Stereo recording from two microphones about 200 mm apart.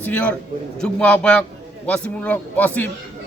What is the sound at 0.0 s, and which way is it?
A man's voice, 10° left (ahead or behind).